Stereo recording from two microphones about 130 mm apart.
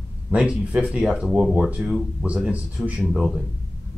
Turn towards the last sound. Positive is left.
turn(degrees=0)  # may be behind; listen again after turning